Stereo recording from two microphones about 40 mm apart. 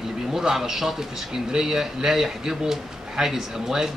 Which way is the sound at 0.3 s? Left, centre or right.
Centre.